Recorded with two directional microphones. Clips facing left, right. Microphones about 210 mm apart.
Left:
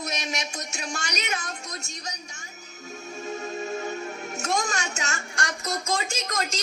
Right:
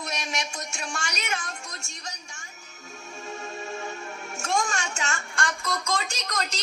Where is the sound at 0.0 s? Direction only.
40° left (ahead or behind).